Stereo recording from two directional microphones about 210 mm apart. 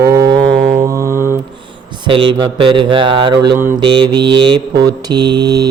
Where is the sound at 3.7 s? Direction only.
20° right (ahead or behind).